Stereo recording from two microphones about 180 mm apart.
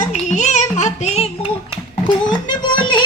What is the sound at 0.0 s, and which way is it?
Music, 40° left (ahead or behind).